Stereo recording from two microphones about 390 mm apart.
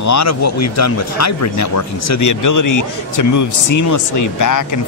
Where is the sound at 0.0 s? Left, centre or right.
Left.